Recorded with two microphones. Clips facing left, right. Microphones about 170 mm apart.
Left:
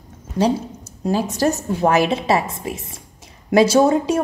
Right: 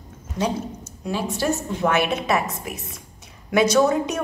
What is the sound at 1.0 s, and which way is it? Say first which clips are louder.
A woman's voice: left 5 dB; 40° left (ahead or behind).